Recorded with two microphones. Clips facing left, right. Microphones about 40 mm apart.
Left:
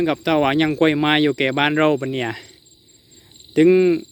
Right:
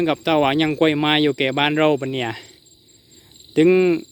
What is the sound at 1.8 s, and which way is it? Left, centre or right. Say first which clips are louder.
Speech: even; right.